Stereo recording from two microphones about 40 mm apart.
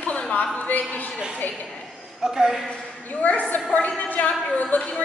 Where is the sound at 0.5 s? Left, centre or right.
Left.